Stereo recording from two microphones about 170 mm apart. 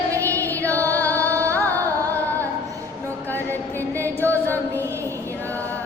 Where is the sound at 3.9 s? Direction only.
10° left (ahead or behind).